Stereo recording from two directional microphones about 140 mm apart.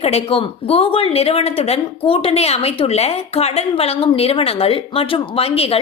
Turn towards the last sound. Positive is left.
turn(degrees=45)  # may be behind; listen again after turning